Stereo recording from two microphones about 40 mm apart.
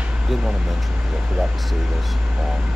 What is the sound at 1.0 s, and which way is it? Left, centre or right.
Air conditioning, centre.